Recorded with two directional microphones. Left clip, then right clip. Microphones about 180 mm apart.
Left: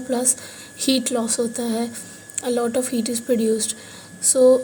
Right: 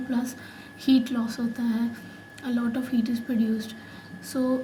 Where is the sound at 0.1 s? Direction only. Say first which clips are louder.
Left 11 dB; 40° left (ahead or behind).